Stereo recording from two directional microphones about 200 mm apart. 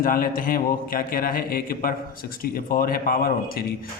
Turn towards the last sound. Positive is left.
turn(degrees=50)  # may be behind; listen again after turning